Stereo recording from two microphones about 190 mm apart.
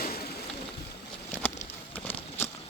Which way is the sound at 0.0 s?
55° left (ahead or behind).